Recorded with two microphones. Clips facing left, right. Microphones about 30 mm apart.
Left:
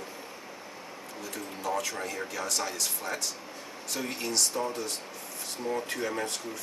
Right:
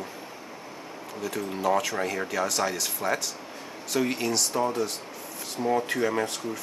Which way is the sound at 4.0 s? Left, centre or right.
Centre.